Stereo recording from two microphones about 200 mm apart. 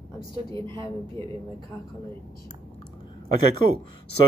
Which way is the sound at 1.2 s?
15° left (ahead or behind).